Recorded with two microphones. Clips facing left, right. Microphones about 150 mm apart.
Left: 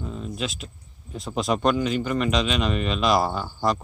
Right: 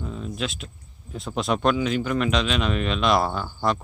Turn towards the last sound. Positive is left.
turn(degrees=0)  # may be behind; listen again after turning